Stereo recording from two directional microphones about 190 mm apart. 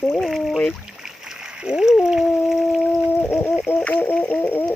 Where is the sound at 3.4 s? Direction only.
5° left (ahead or behind).